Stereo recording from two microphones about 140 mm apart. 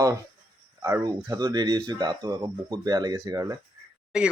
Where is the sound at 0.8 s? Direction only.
20° right (ahead or behind).